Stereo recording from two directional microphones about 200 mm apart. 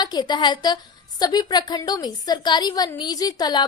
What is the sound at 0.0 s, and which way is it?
A woman's voice, 20° left (ahead or behind).